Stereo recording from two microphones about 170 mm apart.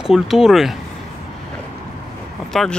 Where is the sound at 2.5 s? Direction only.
Centre (ahead or behind).